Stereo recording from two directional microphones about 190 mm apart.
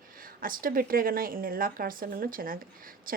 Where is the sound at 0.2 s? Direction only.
50° right (ahead or behind).